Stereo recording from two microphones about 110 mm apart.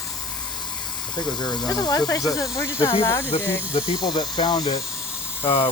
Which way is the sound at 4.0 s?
40° left (ahead or behind).